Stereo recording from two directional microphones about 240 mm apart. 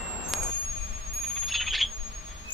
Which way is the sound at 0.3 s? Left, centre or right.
Centre.